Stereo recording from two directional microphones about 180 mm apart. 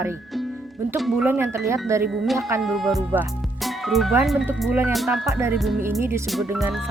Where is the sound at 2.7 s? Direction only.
Centre (ahead or behind).